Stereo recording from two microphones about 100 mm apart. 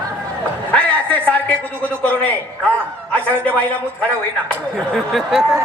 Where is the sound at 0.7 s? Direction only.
15° left (ahead or behind).